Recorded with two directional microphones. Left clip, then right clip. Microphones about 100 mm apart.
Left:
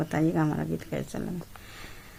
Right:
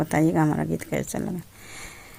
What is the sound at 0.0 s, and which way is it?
Speech, 60° right (ahead or behind).